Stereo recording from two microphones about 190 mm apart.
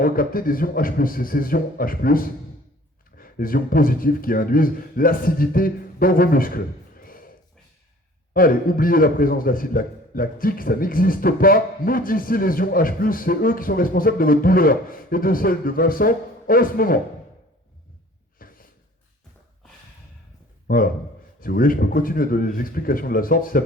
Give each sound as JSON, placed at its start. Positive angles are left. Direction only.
{"t": 0.0, "sound": "a man's voice", "side_deg": 50}
{"t": 18.3, "sound": "a sound", "side_deg": 50}
{"t": 20.7, "sound": "a man's voice", "side_deg": 50}